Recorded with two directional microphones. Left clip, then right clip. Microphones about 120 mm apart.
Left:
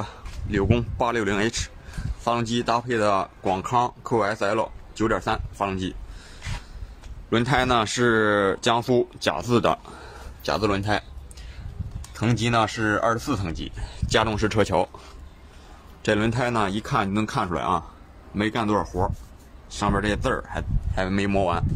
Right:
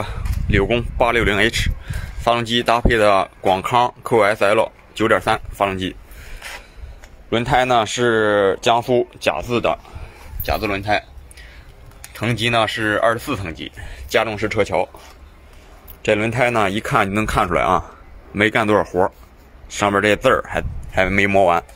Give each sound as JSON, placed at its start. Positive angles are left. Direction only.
{"t": 0.0, "sound": "a sound", "side_deg": -10}
{"t": 0.9, "sound": "speech", "side_deg": -10}
{"t": 7.2, "sound": "speech", "side_deg": 5}
{"t": 9.5, "sound": "speech", "side_deg": 50}
{"t": 10.4, "sound": "speech", "side_deg": 40}
{"t": 12.2, "sound": "speech", "side_deg": 10}
{"t": 13.8, "sound": "speech", "side_deg": 25}
{"t": 16.1, "sound": "a man's voice", "side_deg": 0}
{"t": 16.3, "sound": "speech", "side_deg": -20}
{"t": 17.3, "sound": "speech", "side_deg": -35}